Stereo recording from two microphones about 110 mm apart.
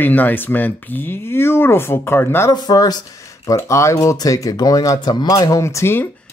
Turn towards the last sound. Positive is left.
turn(degrees=25)  # may be behind; listen again after turning